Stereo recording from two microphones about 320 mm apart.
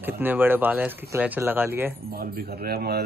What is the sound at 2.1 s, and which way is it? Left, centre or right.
Speech, right.